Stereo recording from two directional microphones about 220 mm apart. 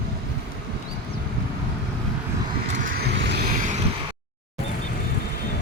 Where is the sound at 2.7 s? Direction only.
40° right (ahead or behind).